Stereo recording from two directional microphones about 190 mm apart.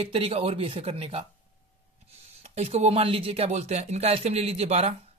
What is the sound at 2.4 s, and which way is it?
Speech, 35° right (ahead or behind).